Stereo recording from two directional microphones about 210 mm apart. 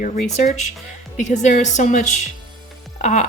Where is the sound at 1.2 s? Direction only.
35° left (ahead or behind).